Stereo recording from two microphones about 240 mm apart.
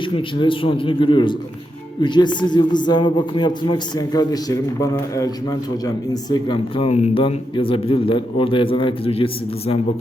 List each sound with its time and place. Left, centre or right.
0.0 s a man's voice: left